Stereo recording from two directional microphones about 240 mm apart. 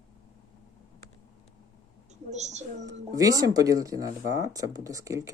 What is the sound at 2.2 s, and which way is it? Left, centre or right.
Speech, right.